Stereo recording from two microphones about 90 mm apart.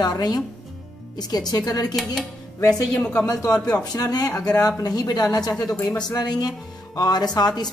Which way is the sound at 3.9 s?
45° left (ahead or behind).